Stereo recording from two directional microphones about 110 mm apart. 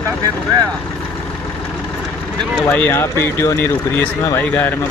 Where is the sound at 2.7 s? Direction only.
20° left (ahead or behind).